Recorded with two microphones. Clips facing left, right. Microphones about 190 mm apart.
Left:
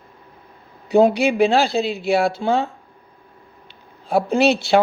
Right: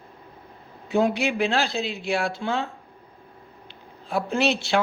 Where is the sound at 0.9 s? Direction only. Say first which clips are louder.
Left 7 dB; 35° left (ahead or behind).